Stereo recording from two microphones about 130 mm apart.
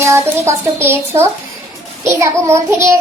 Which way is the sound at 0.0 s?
20° right (ahead or behind).